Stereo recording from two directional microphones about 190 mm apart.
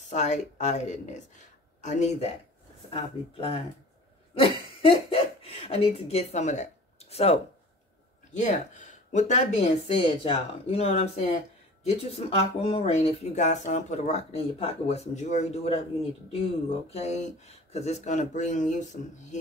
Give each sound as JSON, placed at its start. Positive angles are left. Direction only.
{"t": 0.1, "sound": "speech", "side_deg": 40}
{"t": 4.4, "sound": "a sound", "side_deg": 30}
{"t": 8.3, "sound": "speech", "side_deg": 40}